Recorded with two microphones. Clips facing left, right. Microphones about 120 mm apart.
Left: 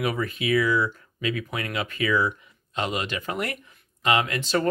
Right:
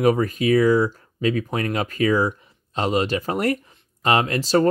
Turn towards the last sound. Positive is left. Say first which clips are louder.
# right 5 dB
turn(degrees=-35)  # may be behind; listen again after turning